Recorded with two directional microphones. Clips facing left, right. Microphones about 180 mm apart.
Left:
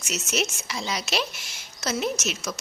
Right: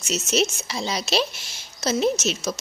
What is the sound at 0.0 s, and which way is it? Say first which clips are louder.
Speech: right 5 dB; 30° right (ahead or behind).